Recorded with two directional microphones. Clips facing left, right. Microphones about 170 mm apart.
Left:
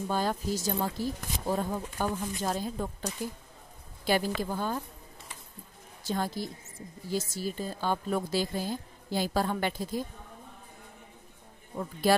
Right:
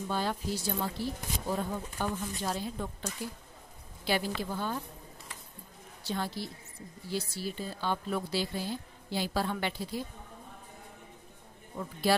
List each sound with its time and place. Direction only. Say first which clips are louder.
0.1 s a woman's voice: left 3 dB; 45° left (ahead or behind)
6.0 s speech: left 3 dB; 45° left (ahead or behind)
12.0 s speech: left 3 dB; 45° left (ahead or behind)